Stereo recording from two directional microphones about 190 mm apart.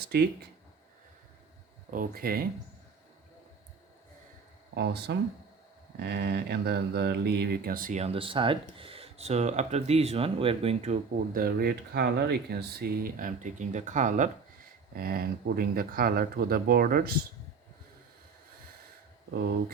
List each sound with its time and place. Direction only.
1.9 s speech: 50° right (ahead or behind)
4.7 s speech: 60° right (ahead or behind); by 11.0 s 35° right (ahead or behind)
11.3 s speech: 55° right (ahead or behind)
14.9 s speech: 50° right (ahead or behind)
19.3 s speech: 60° right (ahead or behind)